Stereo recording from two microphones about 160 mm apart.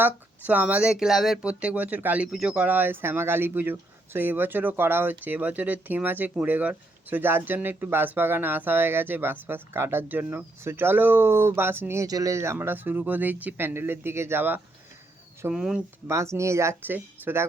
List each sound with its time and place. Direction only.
0.0 s speech: 10° right (ahead or behind)
16.0 s speech: 15° right (ahead or behind)